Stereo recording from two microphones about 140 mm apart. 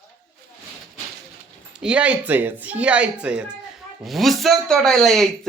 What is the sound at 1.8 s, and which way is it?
A woman's voice, 10° right (ahead or behind).